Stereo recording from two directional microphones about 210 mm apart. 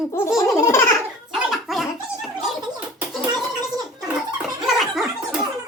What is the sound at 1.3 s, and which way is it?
Gargling, centre (ahead or behind).